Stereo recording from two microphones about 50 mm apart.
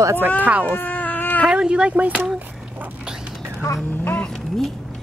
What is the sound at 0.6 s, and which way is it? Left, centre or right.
Baby cry, left.